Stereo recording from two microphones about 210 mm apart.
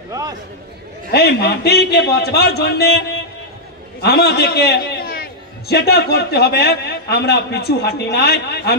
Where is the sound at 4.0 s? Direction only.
50° left (ahead or behind).